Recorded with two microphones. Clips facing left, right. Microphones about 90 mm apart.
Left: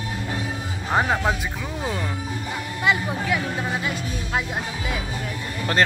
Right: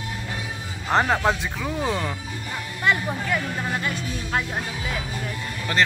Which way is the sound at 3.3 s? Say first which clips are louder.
Left 2 dB; 5° left (ahead or behind).